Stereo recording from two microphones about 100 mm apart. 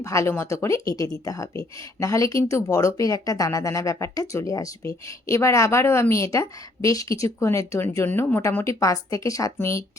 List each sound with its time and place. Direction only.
0.0 s speech: 30° left (ahead or behind)